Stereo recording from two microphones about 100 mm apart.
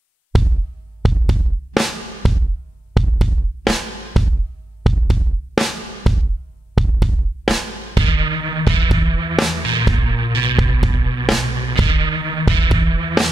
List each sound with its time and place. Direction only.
0.3 s music: centre (ahead or behind)
1.0 s drum: centre (ahead or behind)
2.9 s music: centre (ahead or behind)
7.9 s music: 55° right (ahead or behind)
9.3 s music: centre (ahead or behind)
9.7 s music: 50° right (ahead or behind)